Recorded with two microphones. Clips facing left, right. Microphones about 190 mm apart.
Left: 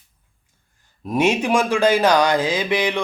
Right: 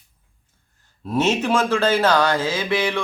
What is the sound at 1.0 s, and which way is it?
Speech, 15° left (ahead or behind).